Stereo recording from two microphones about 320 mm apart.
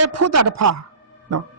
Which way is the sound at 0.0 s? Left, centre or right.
Right.